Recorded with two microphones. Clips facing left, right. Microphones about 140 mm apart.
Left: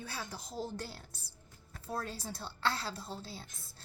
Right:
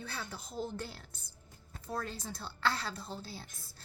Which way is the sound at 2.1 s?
5° left (ahead or behind).